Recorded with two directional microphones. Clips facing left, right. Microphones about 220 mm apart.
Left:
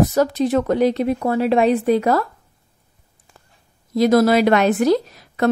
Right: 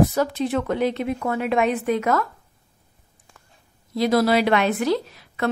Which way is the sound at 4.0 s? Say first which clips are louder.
Left 5 dB; 45° left (ahead or behind).